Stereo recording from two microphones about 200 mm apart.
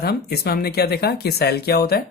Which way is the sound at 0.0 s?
55° left (ahead or behind).